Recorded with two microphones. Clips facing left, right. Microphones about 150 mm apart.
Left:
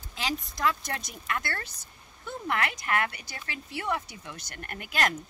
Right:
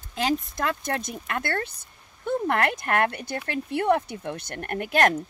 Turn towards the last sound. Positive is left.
turn(degrees=-55)  # may be behind; listen again after turning